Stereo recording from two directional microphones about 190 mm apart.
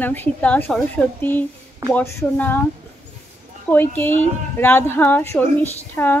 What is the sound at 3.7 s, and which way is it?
Speech, 10° left (ahead or behind).